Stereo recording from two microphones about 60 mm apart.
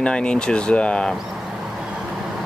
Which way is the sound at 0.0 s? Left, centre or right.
Centre.